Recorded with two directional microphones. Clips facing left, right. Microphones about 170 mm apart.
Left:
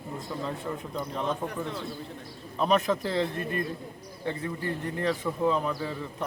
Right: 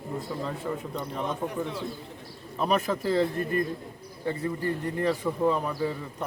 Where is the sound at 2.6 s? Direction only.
5° right (ahead or behind).